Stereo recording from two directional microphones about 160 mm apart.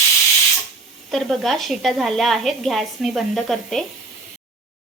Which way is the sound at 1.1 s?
Centre (ahead or behind).